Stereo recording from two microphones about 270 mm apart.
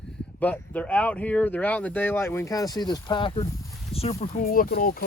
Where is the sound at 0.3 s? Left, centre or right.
Centre.